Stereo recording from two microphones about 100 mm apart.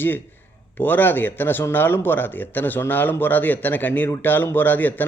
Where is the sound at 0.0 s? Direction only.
20° left (ahead or behind).